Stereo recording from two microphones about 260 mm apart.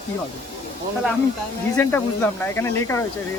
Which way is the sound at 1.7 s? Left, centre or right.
Centre.